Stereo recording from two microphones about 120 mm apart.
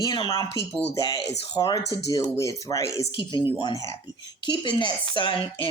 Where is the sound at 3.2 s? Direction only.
40° left (ahead or behind).